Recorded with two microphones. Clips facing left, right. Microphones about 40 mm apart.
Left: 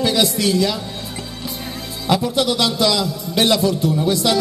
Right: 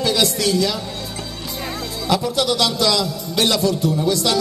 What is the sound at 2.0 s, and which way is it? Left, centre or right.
A man's voice, centre.